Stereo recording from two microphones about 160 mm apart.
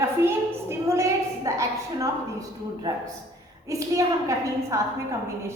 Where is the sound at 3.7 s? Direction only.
20° right (ahead or behind).